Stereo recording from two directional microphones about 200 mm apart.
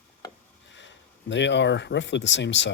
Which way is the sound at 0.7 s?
65° left (ahead or behind).